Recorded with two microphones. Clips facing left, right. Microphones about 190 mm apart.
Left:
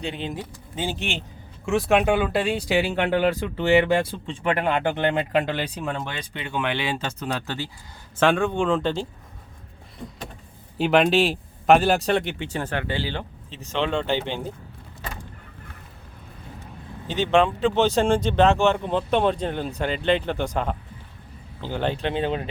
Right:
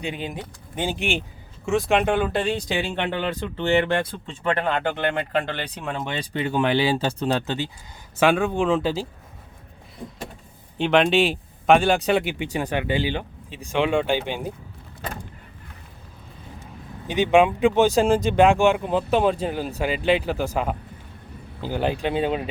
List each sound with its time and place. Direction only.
0.0 s speech: 10° right (ahead or behind)
1.6 s speech: centre (ahead or behind)
6.3 s speech: 40° right (ahead or behind); by 7.7 s 20° right (ahead or behind)
8.2 s speech: 10° right (ahead or behind)
10.8 s speech: 5° left (ahead or behind); by 14.5 s 15° right (ahead or behind)
17.1 s speech: 10° right (ahead or behind)